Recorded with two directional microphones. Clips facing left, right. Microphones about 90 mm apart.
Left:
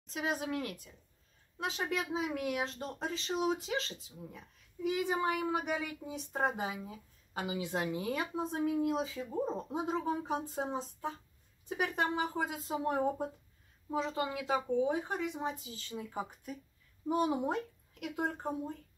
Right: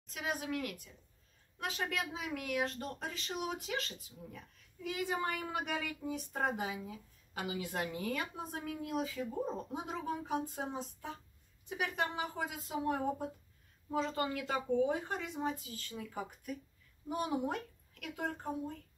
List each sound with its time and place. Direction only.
0.0 s a woman's voice: 30° left (ahead or behind)
13.8 s speech: 15° left (ahead or behind)